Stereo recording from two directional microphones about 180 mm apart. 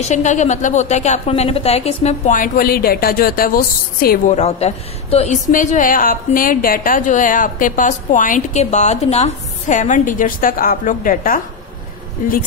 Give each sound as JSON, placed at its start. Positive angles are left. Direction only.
{"t": 0.1, "sound": "a woman's voice", "side_deg": 40}
{"t": 4.4, "sound": "a woman's voice", "side_deg": 35}